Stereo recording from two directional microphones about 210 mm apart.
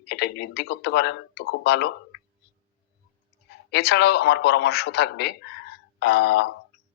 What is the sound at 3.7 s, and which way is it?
A man's voice, 50° left (ahead or behind).